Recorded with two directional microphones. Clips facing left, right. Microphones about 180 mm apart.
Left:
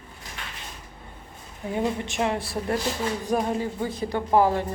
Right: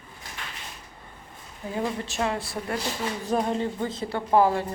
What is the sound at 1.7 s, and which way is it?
Speech, 20° left (ahead or behind).